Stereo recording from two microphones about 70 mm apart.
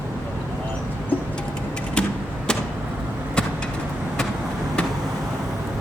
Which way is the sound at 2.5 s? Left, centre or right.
Centre.